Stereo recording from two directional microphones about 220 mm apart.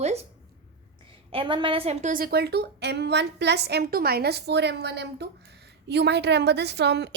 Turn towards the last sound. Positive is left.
turn(degrees=-50)  # may be behind; listen again after turning